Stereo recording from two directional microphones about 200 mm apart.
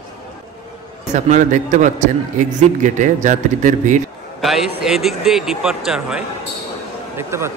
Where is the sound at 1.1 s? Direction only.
35° right (ahead or behind).